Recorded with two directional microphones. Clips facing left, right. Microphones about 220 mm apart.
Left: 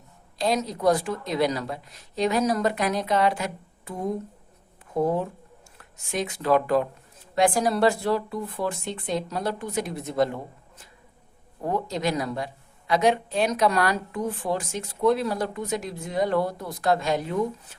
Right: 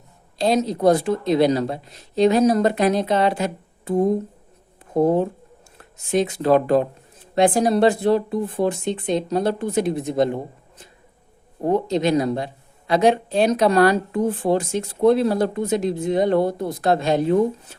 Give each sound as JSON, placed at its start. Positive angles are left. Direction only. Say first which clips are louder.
{"t": 0.3, "sound": "speech", "louder": "right 6 dB", "side_deg": -25}